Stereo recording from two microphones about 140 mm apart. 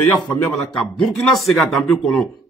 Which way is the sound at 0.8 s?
Centre (ahead or behind).